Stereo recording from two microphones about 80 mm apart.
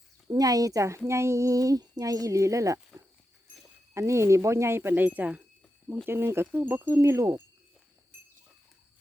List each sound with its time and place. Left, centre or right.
0.3 s speech: right
3.9 s speech: right; by 5.5 s centre
6.1 s speech: right